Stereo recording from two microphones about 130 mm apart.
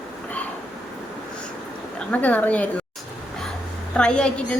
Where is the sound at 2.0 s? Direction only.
10° left (ahead or behind).